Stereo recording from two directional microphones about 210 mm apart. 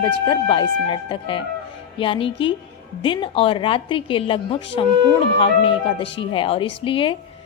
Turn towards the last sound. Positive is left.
turn(degrees=25)  # may be behind; listen again after turning